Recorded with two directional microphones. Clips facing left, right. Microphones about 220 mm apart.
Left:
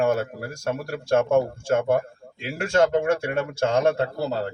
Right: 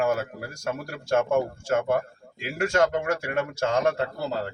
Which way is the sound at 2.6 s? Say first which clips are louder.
Left 3 dB; 25° left (ahead or behind).